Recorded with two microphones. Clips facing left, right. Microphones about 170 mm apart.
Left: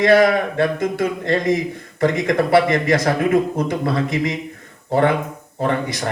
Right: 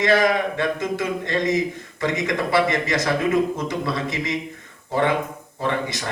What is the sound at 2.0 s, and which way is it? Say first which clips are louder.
A man's voice: left 6 dB; 50° left (ahead or behind).